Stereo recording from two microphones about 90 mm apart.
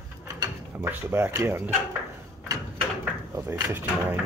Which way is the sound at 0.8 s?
25° right (ahead or behind).